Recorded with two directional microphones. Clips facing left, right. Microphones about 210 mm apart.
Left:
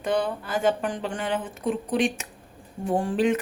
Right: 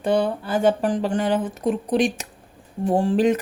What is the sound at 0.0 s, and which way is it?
A woman's voice, 30° right (ahead or behind).